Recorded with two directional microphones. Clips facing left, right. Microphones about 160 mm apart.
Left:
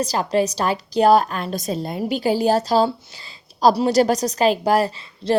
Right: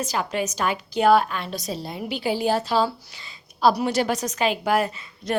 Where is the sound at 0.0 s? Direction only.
35° left (ahead or behind).